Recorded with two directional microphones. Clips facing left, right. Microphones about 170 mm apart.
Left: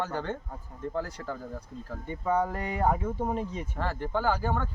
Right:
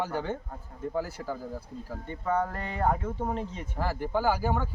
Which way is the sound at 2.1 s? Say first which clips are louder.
Left 1 dB; 10° left (ahead or behind).